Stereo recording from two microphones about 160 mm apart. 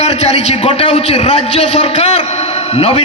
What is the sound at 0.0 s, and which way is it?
A man's voice, 45° left (ahead or behind).